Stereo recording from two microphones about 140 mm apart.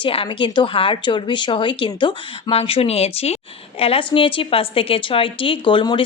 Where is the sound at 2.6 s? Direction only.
45° left (ahead or behind).